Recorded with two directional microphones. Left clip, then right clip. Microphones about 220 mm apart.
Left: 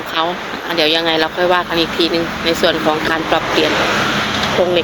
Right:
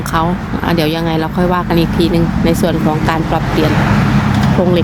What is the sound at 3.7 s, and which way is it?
Speech, 50° right (ahead or behind).